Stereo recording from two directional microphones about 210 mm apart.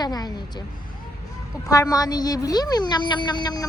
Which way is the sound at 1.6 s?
15° left (ahead or behind).